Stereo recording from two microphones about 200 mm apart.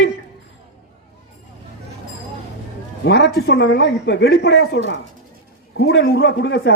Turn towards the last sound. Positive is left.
turn(degrees=60)  # may be behind; listen again after turning